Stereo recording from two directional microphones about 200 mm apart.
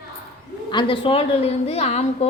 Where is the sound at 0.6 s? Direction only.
25° left (ahead or behind).